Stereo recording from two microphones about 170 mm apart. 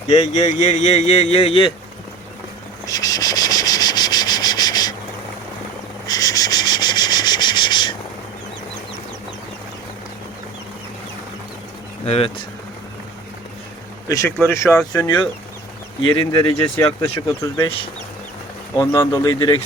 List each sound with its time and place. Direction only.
0.1 s speech: 45° left (ahead or behind)
2.8 s sanding: 20° left (ahead or behind)
6.1 s a sound: 20° left (ahead or behind)
12.0 s speech: 35° left (ahead or behind)
14.1 s speech: 20° left (ahead or behind)
17.4 s speech: 25° left (ahead or behind)
18.8 s speech: 20° left (ahead or behind)